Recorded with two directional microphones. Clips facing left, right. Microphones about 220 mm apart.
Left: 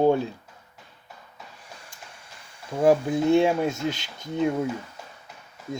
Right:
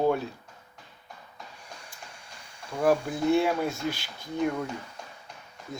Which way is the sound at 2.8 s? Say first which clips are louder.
Left 5 dB; 20° left (ahead or behind).